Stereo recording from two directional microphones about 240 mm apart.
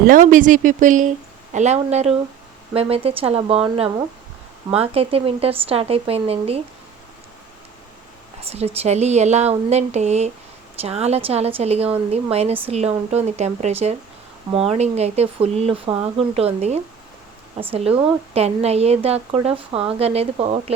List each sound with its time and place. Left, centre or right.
0.1 s speech: right
4.8 s speech: right
8.4 s speech: right